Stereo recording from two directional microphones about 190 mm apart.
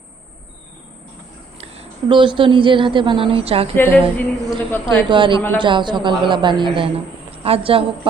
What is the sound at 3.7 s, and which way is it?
Female singing, 10° left (ahead or behind).